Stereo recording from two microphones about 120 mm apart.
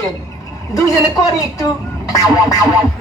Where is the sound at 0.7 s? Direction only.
30° left (ahead or behind).